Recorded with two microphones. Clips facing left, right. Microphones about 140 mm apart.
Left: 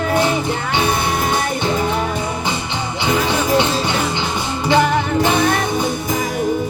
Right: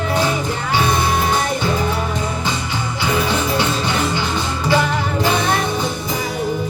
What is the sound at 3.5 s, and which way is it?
Music, 20° left (ahead or behind).